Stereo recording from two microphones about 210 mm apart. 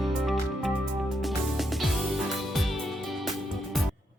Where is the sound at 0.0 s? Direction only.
Centre (ahead or behind).